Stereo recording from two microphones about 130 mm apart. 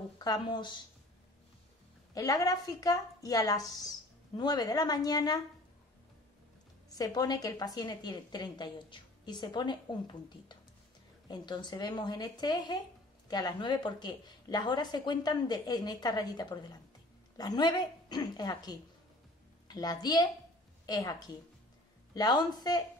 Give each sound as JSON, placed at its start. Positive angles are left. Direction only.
{"t": 0.2, "sound": "a woman's voice", "side_deg": 35}
{"t": 2.1, "sound": "a woman's voice", "side_deg": 25}
{"t": 7.0, "sound": "a woman's voice", "side_deg": 30}